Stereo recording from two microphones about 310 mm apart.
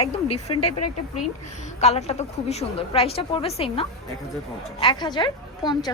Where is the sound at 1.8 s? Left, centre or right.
Left.